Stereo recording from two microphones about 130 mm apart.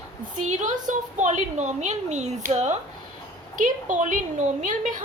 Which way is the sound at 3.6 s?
80° right.